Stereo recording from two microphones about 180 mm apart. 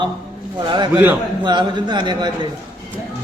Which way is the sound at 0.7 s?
25° right (ahead or behind).